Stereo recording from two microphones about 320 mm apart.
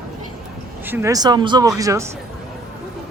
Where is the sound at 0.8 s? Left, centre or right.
Centre.